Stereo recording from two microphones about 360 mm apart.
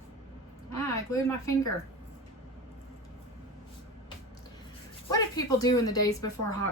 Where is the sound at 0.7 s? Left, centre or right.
Centre.